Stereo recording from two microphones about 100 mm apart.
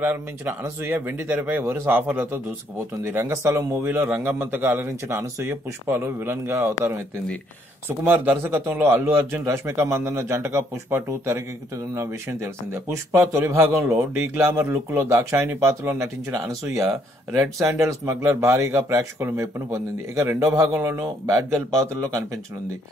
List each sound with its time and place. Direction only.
0.0 s speech: 25° right (ahead or behind)
8.0 s speech: 20° right (ahead or behind)